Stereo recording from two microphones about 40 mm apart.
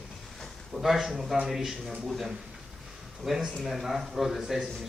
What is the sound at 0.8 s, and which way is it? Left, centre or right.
Speech, centre.